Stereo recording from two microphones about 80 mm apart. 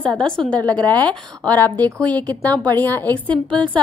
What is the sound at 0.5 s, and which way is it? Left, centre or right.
Speech, right.